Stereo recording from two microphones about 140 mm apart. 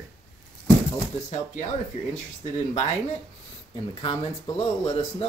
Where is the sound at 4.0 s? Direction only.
40° left (ahead or behind).